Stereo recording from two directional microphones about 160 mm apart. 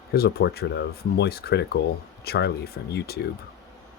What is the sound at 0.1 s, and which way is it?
Speech, 80° left.